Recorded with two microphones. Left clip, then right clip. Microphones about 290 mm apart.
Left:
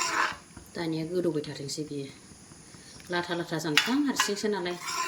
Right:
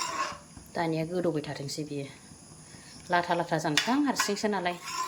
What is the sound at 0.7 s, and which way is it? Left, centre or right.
Speech, centre.